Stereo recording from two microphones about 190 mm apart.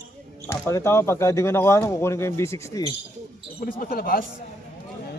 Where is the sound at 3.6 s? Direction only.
50° left (ahead or behind).